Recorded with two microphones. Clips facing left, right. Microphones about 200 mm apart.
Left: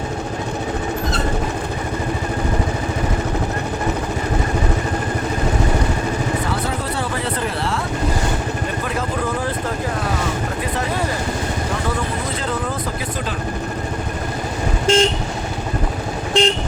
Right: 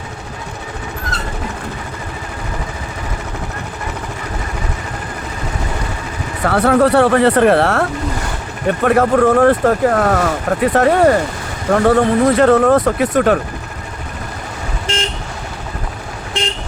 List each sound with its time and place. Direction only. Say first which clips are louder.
6.4 s speech: right 11 dB; 70° right (ahead or behind)